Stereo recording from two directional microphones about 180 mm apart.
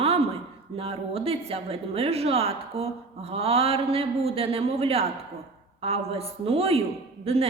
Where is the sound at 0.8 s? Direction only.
35° right (ahead or behind).